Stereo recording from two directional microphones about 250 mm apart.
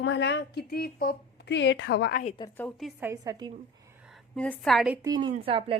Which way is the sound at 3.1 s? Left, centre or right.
Centre.